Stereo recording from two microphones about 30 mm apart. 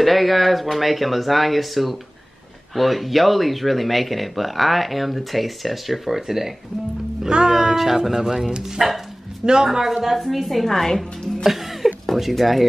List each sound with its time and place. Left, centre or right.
0.0 s speech: centre
7.2 s speech: right
7.5 s speech: centre
10.0 s speech: centre
10.7 s a woman's voice: centre
11.4 s a sound: centre
12.2 s speech: centre